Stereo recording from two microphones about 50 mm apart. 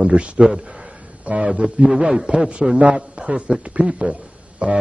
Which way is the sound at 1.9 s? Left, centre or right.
Centre.